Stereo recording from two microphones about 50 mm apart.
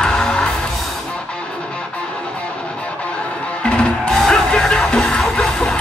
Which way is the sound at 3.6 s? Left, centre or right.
Centre.